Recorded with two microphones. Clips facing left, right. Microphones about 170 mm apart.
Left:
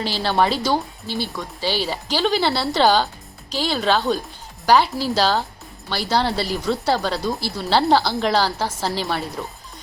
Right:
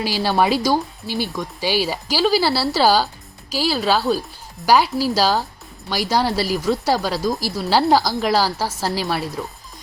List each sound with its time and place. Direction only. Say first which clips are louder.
0.0 s speech: right 1 dB; 10° right (ahead or behind)